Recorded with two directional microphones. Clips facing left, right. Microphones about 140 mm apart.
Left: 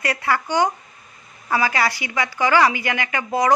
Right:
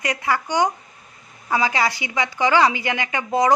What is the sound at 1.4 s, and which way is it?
A man's voice, 20° right (ahead or behind).